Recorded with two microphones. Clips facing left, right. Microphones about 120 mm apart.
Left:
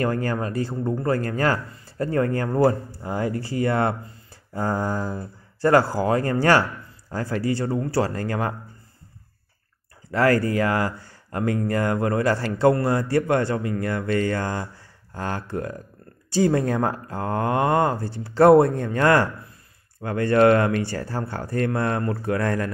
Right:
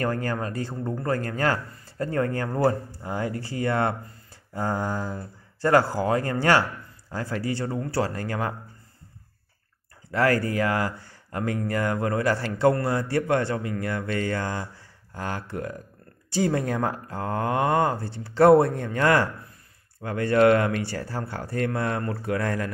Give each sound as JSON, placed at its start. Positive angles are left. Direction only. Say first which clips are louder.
{"t": 0.0, "sound": "speech", "louder": "left 3 dB", "side_deg": 30}
{"t": 10.1, "sound": "speech", "louder": "left 3 dB", "side_deg": 35}